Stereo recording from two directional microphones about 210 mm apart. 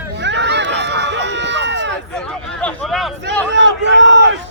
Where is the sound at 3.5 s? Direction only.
60° right (ahead or behind).